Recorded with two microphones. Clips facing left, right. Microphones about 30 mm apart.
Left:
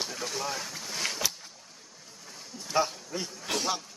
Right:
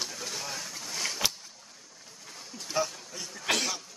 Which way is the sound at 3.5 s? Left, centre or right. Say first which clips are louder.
Right 4 dB; right.